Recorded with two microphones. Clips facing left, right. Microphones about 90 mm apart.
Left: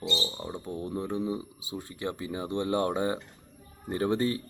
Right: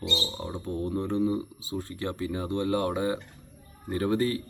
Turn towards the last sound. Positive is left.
turn(degrees=25)  # may be behind; listen again after turning